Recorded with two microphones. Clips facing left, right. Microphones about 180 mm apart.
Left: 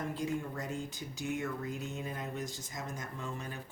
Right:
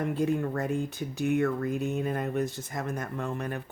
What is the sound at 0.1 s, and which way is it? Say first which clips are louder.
Speech: right 9 dB; 60° right (ahead or behind).